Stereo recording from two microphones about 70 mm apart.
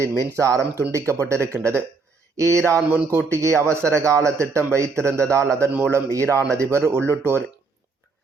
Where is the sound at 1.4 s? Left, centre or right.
Left.